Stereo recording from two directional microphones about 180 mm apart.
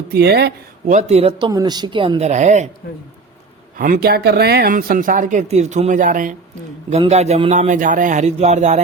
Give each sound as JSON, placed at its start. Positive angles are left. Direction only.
{"t": 0.1, "sound": "speech", "side_deg": -65}
{"t": 0.9, "sound": "a man's voice", "side_deg": -40}
{"t": 1.5, "sound": "a woman's voice", "side_deg": -20}
{"t": 3.8, "sound": "a man's voice", "side_deg": -50}